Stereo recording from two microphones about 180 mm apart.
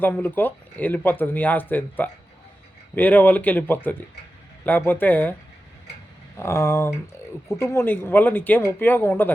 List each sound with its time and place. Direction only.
0.0 s speech: 10° left (ahead or behind)
6.3 s speech: 15° left (ahead or behind)